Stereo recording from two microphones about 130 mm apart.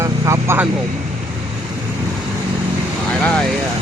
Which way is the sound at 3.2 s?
10° left (ahead or behind).